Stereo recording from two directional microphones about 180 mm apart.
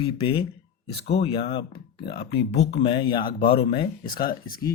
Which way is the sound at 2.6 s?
35° left (ahead or behind).